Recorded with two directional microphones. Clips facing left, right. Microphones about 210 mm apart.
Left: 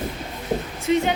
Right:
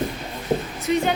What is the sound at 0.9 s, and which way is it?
Speech, 20° left (ahead or behind).